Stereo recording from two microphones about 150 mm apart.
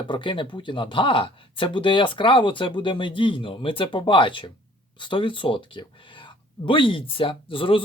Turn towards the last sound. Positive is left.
turn(degrees=35)  # may be behind; listen again after turning